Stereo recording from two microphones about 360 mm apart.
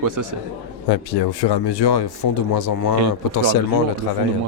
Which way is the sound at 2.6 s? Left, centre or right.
Left.